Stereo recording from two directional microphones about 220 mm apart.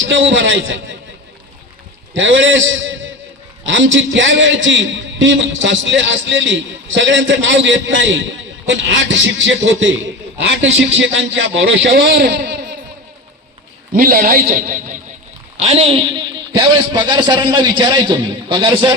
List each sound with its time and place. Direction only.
0.0 s a man's voice: 60° right (ahead or behind)
2.1 s a man's voice: 60° right (ahead or behind)
13.9 s a man's voice: 40° right (ahead or behind); by 18.9 s 20° right (ahead or behind)